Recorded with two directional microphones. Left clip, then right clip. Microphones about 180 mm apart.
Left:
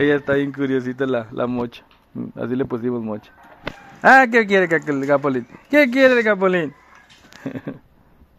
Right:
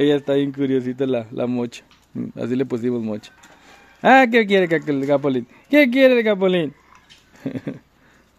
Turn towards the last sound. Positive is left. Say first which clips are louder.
# right 1 dB
turn(degrees=-35)  # may be behind; listen again after turning